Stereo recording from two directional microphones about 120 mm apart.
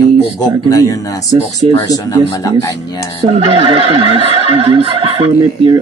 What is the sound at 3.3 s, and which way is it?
Speech, 50° right (ahead or behind).